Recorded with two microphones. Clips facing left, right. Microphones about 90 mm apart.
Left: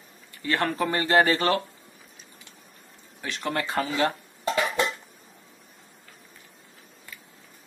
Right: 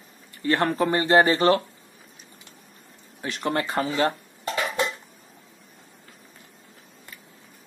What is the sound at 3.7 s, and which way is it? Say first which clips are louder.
Speech: even; 30° right (ahead or behind).